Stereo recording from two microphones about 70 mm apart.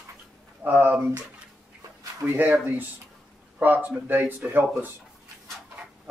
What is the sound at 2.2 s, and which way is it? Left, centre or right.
Speech, right.